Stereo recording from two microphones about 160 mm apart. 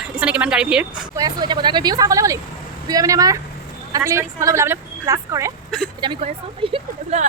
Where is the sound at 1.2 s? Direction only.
25° right (ahead or behind).